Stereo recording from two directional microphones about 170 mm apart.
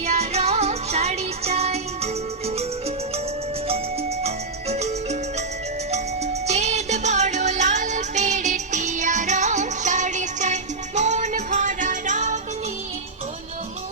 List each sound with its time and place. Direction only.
0.0 s music: 40° right (ahead or behind)